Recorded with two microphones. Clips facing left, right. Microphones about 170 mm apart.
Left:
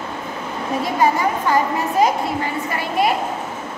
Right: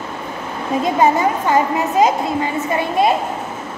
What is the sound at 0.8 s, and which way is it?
Speech, 20° right (ahead or behind).